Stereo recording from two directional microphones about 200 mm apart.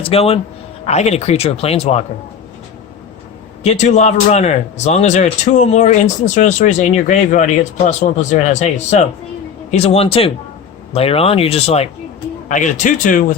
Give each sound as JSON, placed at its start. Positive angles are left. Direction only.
{"t": 0.0, "sound": "a man's voice", "side_deg": 30}
{"t": 3.6, "sound": "a man's voice", "side_deg": 35}